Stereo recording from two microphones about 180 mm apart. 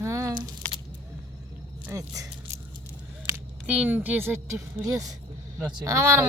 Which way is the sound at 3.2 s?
10° right (ahead or behind).